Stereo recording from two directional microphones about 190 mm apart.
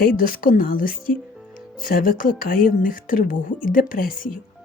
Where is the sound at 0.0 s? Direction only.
50° left (ahead or behind).